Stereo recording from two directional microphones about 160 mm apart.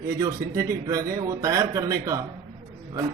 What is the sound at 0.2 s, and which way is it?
A man's voice, 20° right (ahead or behind).